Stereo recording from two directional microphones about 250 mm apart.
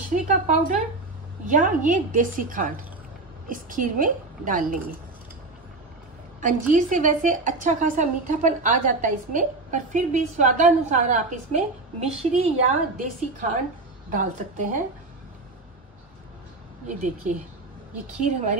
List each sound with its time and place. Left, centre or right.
0.1 s a woman's voice: right
6.4 s a woman's voice: right
18.2 s a woman's voice: right